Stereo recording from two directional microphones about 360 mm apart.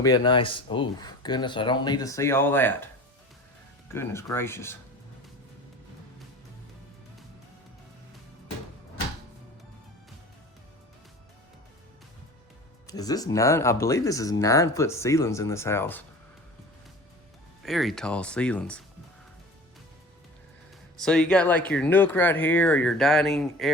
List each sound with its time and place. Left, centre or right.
0.0 s speech: centre
3.9 s speech: centre
12.9 s speech: centre
17.6 s speech: centre
20.9 s speech: centre